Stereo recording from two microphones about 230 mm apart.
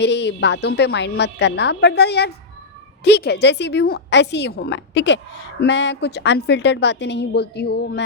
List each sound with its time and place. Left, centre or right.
0.0 s a woman's voice: left